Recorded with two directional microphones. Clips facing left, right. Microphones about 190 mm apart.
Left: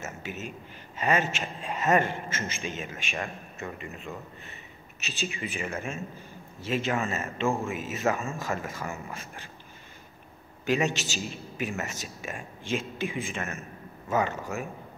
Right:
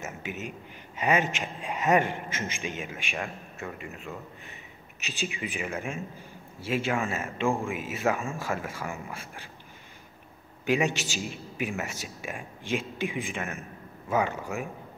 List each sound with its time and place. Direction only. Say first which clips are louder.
0.0 s a man's voice: right 1 dB; 15° right (ahead or behind)
10.6 s a man's voice: right 1 dB; 10° right (ahead or behind)